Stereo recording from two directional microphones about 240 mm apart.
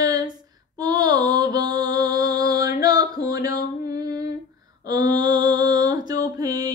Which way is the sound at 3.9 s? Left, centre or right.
Centre.